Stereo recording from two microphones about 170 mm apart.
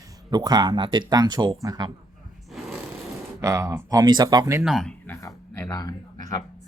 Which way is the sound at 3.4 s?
20° right (ahead or behind).